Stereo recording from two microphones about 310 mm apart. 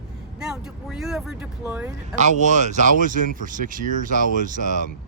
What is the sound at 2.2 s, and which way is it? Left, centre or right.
Speech, right.